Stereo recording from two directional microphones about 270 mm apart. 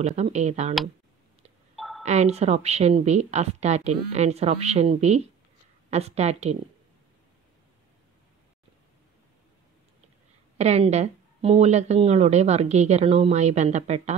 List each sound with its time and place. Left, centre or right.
0.0 s speech: right
1.8 s a sound: centre
2.0 s speech: right
10.6 s speech: right